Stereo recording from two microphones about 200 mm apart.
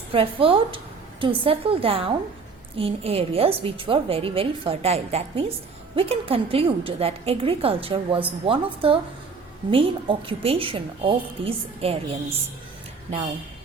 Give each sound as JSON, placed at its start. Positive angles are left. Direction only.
{"t": 0.1, "sound": "a woman's voice", "side_deg": -25}